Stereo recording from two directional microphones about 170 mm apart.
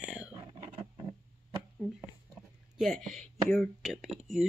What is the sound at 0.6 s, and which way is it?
Roaring cats, 30° right (ahead or behind).